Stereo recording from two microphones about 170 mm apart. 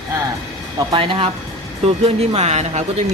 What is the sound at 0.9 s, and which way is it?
Speech, 30° right (ahead or behind).